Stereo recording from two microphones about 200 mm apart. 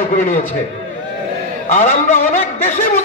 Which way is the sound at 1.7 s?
35° left (ahead or behind).